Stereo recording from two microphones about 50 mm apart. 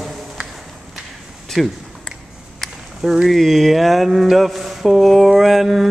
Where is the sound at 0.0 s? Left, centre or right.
Centre.